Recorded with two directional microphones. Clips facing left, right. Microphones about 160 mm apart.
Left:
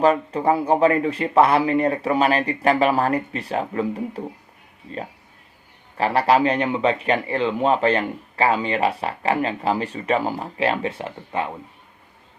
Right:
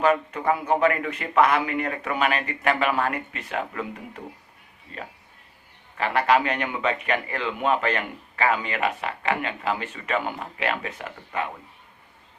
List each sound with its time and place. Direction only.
0.0 s speech: 30° left (ahead or behind)
6.0 s speech: 35° left (ahead or behind)